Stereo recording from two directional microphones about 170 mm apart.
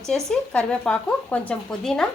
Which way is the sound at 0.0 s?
5° left (ahead or behind).